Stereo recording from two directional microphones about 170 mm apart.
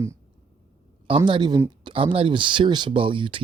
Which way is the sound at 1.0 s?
30° right (ahead or behind).